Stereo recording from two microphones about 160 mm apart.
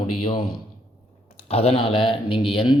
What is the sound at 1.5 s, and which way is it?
Speech, 40° left (ahead or behind).